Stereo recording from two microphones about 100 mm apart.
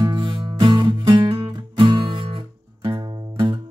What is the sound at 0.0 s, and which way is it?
Music, 50° right (ahead or behind).